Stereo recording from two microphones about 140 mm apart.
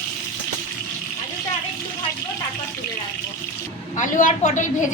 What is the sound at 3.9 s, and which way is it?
Speech, 60° left (ahead or behind).